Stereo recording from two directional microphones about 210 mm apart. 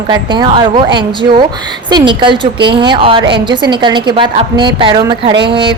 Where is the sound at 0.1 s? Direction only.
20° right (ahead or behind).